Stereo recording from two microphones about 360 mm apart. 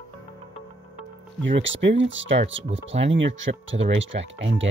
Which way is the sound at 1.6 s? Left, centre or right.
Right.